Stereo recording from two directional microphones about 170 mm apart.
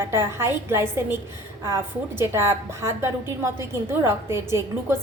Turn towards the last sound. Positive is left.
turn(degrees=-15)  # may be behind; listen again after turning